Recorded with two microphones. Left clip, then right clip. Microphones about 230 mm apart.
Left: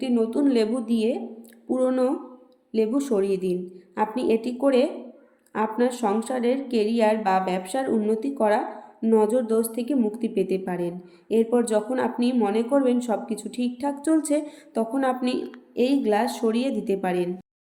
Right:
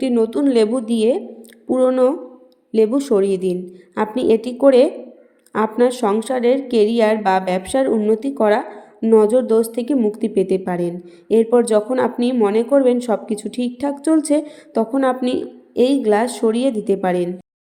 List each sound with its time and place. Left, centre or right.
0.0 s speech: right